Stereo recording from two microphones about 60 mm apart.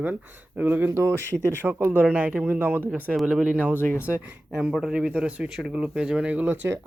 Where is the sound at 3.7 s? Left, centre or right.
Left.